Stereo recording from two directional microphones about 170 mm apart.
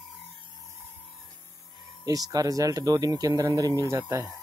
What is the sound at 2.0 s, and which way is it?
Speech, 20° right (ahead or behind).